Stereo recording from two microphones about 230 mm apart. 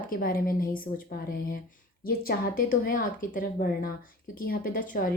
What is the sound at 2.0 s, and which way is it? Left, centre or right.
A woman's voice, left.